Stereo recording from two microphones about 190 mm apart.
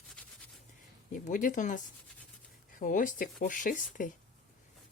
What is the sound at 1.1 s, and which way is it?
Speech, 45° left (ahead or behind).